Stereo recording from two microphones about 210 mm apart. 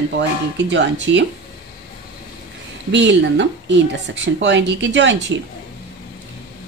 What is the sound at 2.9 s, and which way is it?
A woman's voice, 55° right (ahead or behind).